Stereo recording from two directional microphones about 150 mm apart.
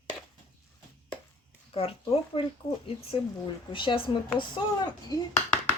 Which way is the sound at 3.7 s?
35° left (ahead or behind).